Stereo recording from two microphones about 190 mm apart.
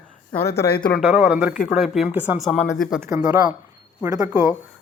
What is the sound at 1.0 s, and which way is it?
Speech, 5° right (ahead or behind).